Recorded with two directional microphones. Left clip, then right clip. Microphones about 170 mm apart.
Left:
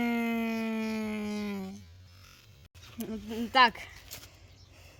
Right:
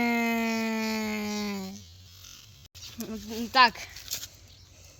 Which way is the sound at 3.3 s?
35° left (ahead or behind).